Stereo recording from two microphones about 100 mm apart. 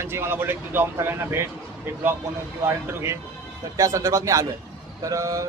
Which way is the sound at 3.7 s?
30° right (ahead or behind).